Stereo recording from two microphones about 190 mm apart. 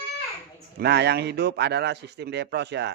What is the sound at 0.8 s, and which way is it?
A man's voice, 60° right (ahead or behind).